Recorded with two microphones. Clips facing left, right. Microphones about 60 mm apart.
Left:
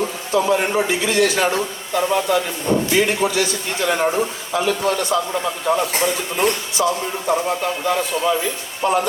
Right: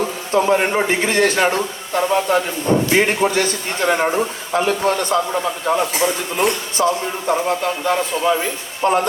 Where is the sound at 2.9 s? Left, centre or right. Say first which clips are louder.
Right 2 dB; right.